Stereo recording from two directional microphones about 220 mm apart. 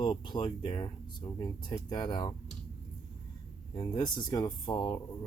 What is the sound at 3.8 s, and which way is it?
Speech, 20° left (ahead or behind).